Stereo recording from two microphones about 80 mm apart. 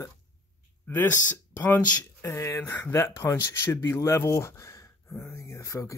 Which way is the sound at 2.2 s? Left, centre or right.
Left.